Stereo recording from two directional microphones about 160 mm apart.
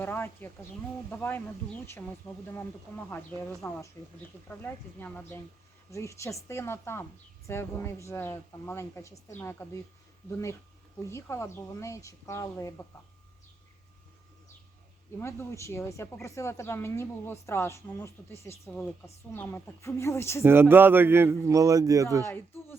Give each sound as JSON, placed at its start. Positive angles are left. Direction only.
{"t": 0.0, "sound": "speech", "side_deg": 10}
{"t": 11.1, "sound": "a woman's voice", "side_deg": 15}
{"t": 15.2, "sound": "speech", "side_deg": 15}
{"t": 20.4, "sound": "a man's voice", "side_deg": -15}